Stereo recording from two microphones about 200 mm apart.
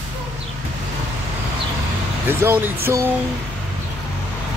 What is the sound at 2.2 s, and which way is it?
Speech, 10° right (ahead or behind).